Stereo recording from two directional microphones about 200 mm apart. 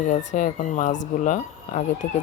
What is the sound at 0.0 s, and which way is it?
Speech, 40° left (ahead or behind).